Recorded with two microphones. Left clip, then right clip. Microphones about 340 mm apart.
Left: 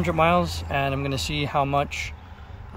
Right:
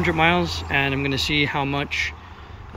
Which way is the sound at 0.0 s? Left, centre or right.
Centre.